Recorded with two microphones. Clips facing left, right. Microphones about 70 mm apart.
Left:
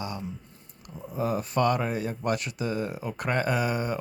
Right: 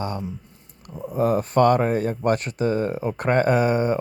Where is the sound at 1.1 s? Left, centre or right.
Right.